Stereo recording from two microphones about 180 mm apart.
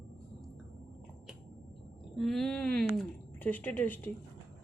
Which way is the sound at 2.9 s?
5° left (ahead or behind).